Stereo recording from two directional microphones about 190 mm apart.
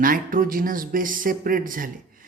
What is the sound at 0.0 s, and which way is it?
A man's voice, 45° right (ahead or behind).